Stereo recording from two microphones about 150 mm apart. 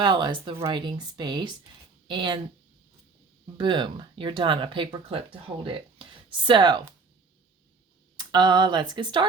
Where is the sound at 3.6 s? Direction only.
30° right (ahead or behind).